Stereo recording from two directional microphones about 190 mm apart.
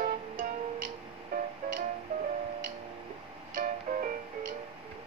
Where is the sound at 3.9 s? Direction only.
50° right (ahead or behind).